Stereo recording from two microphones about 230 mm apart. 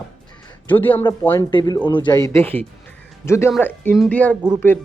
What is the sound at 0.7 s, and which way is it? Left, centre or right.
Speech, centre.